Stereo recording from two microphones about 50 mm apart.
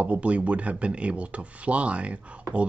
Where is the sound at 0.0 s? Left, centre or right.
Right.